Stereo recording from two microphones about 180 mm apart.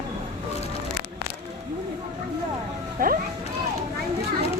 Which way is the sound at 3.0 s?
50° right (ahead or behind).